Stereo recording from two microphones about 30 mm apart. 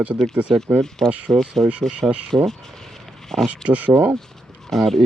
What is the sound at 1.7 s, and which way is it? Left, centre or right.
Speech, right.